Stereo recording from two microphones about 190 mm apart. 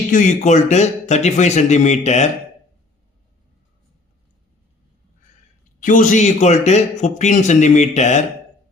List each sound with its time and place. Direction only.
0.1 s speech: 40° left (ahead or behind)
5.8 s speech: 45° left (ahead or behind)